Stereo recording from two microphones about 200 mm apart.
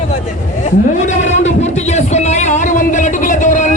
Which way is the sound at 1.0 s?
35° left (ahead or behind).